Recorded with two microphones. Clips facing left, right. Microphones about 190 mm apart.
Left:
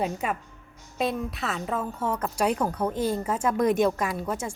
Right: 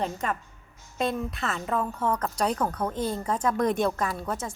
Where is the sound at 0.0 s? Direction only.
10° left (ahead or behind).